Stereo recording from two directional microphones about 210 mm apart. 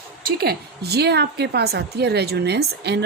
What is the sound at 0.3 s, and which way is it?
A woman's voice, 50° right (ahead or behind).